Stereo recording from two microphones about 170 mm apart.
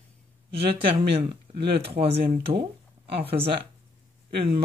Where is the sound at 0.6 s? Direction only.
35° right (ahead or behind).